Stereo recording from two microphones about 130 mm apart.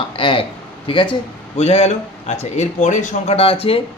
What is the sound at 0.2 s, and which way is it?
Speech, 40° left (ahead or behind).